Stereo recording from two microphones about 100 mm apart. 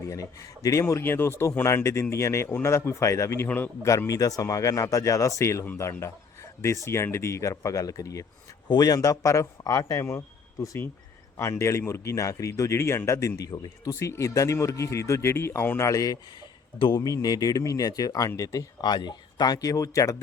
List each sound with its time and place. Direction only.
0.1 s speech: 35° left (ahead or behind); by 3.7 s 20° left (ahead or behind)
3.8 s a man's voice: 30° left (ahead or behind)
14.0 s speech: 30° left (ahead or behind)
15.9 s a man's voice: 35° left (ahead or behind)
17.2 s a man's voice: 40° left (ahead or behind)